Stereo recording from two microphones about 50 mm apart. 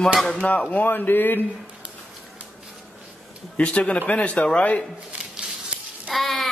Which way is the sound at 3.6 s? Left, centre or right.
Left.